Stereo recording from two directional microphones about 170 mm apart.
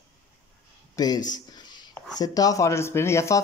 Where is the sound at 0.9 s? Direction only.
25° left (ahead or behind).